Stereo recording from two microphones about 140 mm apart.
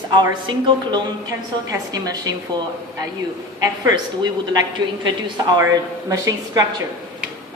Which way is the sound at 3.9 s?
30° right (ahead or behind).